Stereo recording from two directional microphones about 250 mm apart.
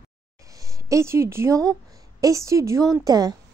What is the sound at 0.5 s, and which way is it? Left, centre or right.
A woman's voice, centre.